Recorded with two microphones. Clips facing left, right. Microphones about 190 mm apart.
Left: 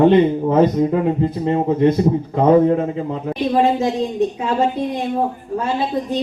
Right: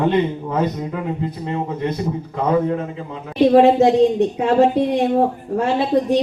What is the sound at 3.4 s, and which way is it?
Speech, 70° right (ahead or behind).